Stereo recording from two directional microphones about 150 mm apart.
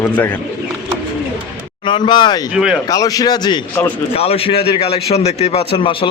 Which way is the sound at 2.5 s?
5° right (ahead or behind).